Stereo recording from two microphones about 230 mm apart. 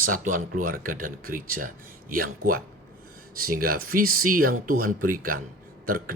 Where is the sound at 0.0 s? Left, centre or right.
Right.